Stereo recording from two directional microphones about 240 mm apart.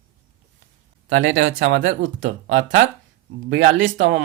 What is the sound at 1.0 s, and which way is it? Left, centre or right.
Speech, right.